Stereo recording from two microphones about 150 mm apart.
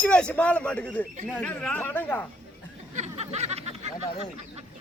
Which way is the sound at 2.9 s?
50° right (ahead or behind).